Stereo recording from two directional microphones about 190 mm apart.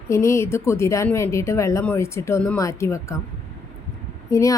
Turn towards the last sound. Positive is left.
turn(degrees=15)  # may be behind; listen again after turning